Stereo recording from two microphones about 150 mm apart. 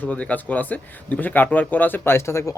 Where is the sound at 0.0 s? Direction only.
10° left (ahead or behind).